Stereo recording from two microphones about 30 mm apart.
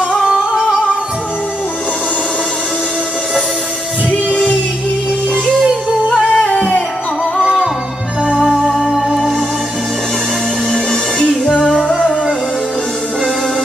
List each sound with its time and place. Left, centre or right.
0.2 s music: centre
4.1 s music: left
6.2 s music: left
8.4 s music: centre
8.7 s music: centre
10.7 s music: centre
11.7 s music: right